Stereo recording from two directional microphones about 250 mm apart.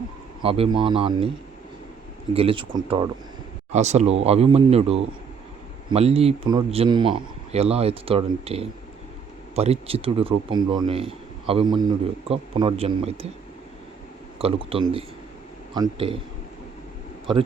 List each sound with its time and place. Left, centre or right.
0.4 s speech: right
2.3 s speech: right
14.3 s speech: right